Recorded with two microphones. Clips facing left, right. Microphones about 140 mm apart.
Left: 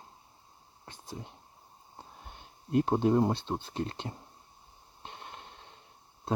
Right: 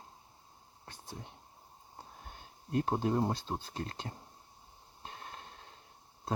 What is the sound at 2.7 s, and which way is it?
Speech, 25° left (ahead or behind).